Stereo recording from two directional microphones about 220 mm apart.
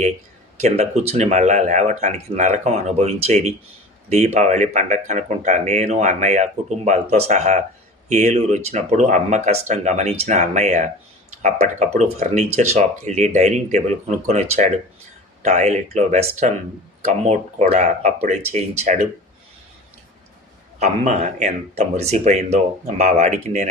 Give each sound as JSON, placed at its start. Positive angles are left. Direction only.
{"t": 0.6, "sound": "speech", "side_deg": -30}
{"t": 20.7, "sound": "speech", "side_deg": -30}